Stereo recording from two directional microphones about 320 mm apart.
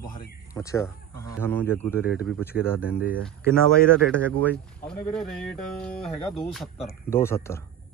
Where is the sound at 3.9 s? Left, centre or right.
Centre.